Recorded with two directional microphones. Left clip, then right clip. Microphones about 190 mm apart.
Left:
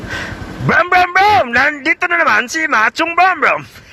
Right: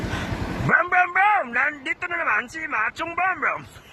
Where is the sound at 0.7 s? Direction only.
25° left (ahead or behind).